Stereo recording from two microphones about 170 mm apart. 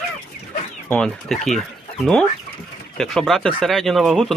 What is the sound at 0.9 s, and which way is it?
Speech, 5° left (ahead or behind).